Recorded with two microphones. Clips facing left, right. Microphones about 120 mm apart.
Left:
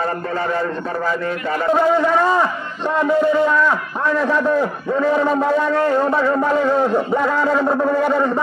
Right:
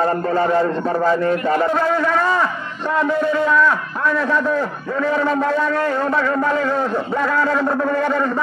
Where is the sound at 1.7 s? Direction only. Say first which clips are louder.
Left 3 dB; 15° left (ahead or behind).